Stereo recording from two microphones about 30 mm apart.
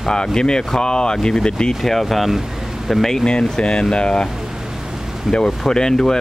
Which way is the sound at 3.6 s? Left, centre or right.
Left.